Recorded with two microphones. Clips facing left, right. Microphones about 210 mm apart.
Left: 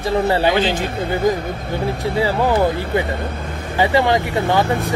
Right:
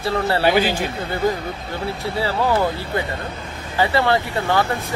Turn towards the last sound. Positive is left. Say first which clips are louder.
# left 3 dB
turn(degrees=15)  # may be behind; listen again after turning